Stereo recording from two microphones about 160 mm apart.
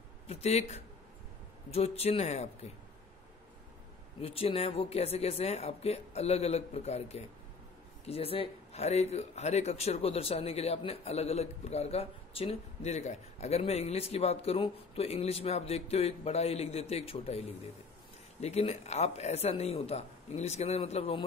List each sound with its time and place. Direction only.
0.3 s speech: 40° left (ahead or behind)
4.2 s speech: 35° left (ahead or behind)